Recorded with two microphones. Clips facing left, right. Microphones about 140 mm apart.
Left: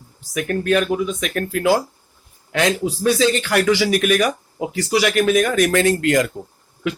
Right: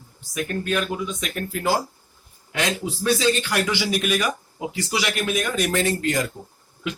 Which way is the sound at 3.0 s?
60° left (ahead or behind).